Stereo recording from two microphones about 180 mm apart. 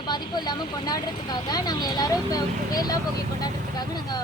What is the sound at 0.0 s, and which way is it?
Speech, 25° left (ahead or behind).